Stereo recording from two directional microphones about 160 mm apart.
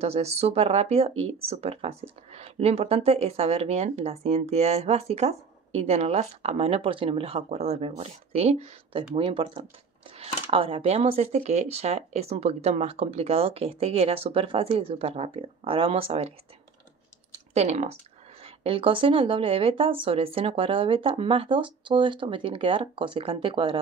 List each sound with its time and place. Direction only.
0.0 s speech: 40° right (ahead or behind)
17.6 s speech: 45° right (ahead or behind)